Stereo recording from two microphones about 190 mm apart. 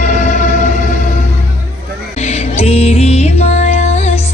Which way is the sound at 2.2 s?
35° left (ahead or behind).